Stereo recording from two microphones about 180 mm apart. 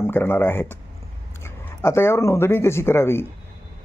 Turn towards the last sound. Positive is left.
turn(degrees=15)  # may be behind; listen again after turning